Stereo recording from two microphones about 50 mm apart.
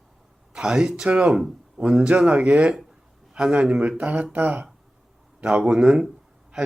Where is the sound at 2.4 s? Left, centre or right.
Right.